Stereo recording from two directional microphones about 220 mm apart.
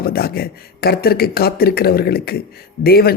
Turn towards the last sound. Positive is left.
turn(degrees=45)  # may be behind; listen again after turning